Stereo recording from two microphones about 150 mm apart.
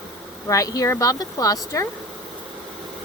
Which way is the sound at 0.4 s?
20° left (ahead or behind).